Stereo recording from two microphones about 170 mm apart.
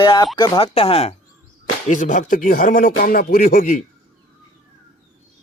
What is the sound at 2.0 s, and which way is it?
Speech, 50° left (ahead or behind).